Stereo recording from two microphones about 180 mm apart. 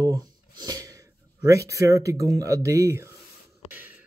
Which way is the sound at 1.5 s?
15° right (ahead or behind).